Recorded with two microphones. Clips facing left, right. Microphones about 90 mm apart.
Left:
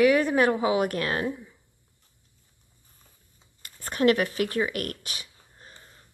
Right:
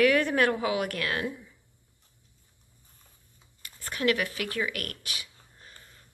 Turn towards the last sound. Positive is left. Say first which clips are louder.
# left 2 dB
turn(degrees=25)  # may be behind; listen again after turning